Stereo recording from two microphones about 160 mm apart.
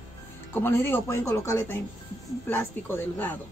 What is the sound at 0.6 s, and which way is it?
Speech, 15° left (ahead or behind).